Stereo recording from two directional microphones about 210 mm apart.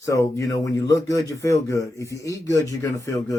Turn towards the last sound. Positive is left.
turn(degrees=15)  # may be behind; listen again after turning